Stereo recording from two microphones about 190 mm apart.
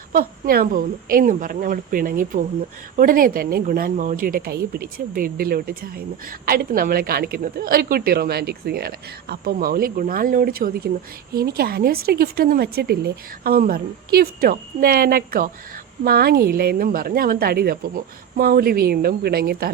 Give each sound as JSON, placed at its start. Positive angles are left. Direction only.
{"t": 0.1, "sound": "a woman's voice", "side_deg": -50}